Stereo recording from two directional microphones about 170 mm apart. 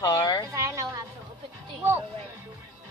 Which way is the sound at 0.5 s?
20° right (ahead or behind).